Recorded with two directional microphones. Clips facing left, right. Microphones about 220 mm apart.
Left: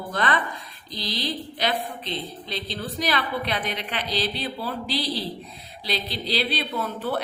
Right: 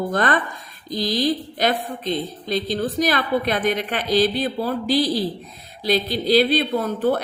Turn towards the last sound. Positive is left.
turn(degrees=-45)  # may be behind; listen again after turning